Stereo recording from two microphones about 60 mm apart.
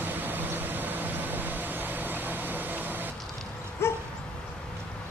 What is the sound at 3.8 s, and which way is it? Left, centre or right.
Dog, left.